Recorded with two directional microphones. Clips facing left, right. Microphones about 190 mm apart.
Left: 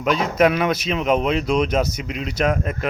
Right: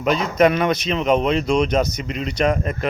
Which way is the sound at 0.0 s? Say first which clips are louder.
Right 1 dB; centre (ahead or behind).